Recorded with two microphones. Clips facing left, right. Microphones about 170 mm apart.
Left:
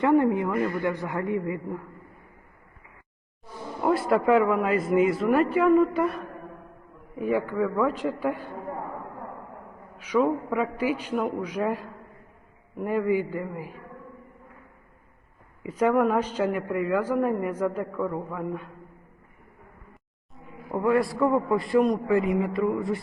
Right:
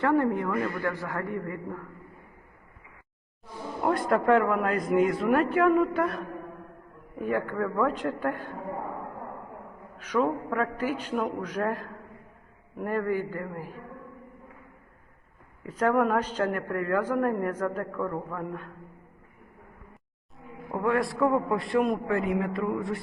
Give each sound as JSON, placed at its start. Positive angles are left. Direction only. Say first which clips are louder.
{"t": 0.0, "sound": "a woman's voice", "louder": "left 3 dB", "side_deg": 15}
{"t": 3.8, "sound": "a man's voice", "louder": "left 2 dB", "side_deg": 5}
{"t": 10.0, "sound": "a woman's voice", "louder": "left 3 dB", "side_deg": 10}
{"t": 12.8, "sound": "a woman's voice", "louder": "left 3 dB", "side_deg": 10}
{"t": 15.6, "sound": "a woman's voice", "louder": "left 2 dB", "side_deg": 10}
{"t": 20.4, "sound": "a man's voice", "louder": "left 2 dB", "side_deg": 0}